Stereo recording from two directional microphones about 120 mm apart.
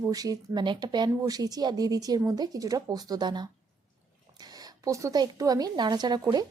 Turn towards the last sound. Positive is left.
turn(degrees=-35)  # may be behind; listen again after turning